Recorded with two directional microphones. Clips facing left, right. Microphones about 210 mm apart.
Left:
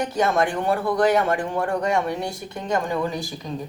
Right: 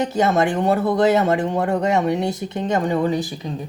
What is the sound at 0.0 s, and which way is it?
Speech, 25° right (ahead or behind).